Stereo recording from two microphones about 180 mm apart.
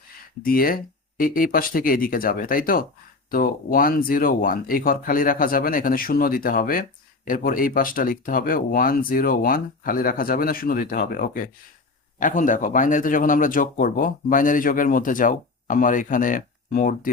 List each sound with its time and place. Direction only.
0.4 s speech: 55° left (ahead or behind)